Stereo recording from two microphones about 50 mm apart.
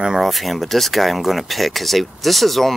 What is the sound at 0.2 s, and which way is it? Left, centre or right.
Speech, centre.